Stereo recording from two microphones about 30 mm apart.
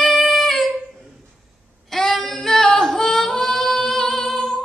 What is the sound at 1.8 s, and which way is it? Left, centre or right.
Female singing, centre.